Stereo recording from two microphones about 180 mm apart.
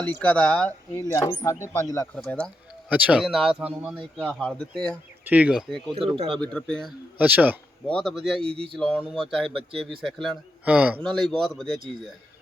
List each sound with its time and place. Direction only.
0.0 s a man's voice: 10° left (ahead or behind)
4.4 s a man's voice: 5° left (ahead or behind)
5.2 s a man's voice: 10° right (ahead or behind)
7.2 s speech: 10° right (ahead or behind)
7.9 s a man's voice: centre (ahead or behind)
8.4 s speech: 30° right (ahead or behind)
8.7 s a man's voice: 5° left (ahead or behind)
11.0 s a man's voice: 5° left (ahead or behind)